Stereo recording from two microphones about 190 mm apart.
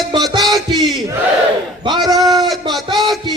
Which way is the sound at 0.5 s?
25° right (ahead or behind).